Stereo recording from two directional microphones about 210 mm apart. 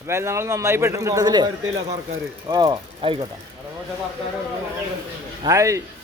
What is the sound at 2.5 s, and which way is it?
Speech, 20° right (ahead or behind).